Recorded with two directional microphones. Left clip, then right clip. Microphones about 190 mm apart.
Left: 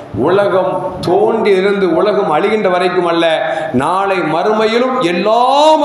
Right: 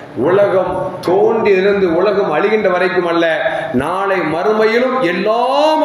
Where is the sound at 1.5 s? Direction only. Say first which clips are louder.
Even; 25° left (ahead or behind).